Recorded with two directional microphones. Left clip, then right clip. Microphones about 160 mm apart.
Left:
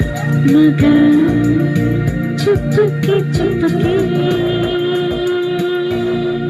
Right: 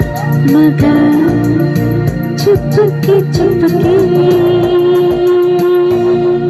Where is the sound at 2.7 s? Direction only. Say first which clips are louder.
Right 4 dB; 50° right (ahead or behind).